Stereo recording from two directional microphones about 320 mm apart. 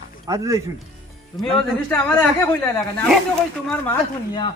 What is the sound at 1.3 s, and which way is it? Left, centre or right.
A man's voice, centre.